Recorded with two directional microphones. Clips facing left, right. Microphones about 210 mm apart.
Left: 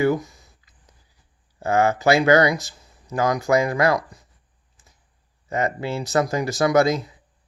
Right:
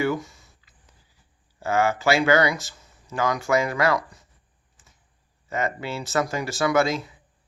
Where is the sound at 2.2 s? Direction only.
35° left (ahead or behind).